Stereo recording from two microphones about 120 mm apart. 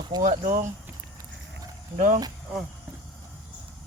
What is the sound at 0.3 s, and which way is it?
Speech, 90° right.